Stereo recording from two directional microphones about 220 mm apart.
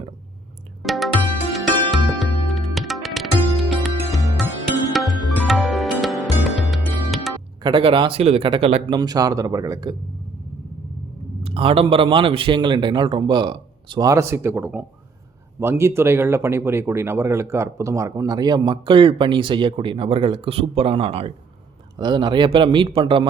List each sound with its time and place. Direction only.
0.8 s music: centre (ahead or behind)
7.6 s speech: 25° right (ahead or behind)
11.4 s speech: 25° right (ahead or behind)